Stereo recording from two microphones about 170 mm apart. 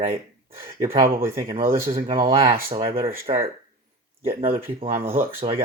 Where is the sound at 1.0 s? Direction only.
60° right (ahead or behind).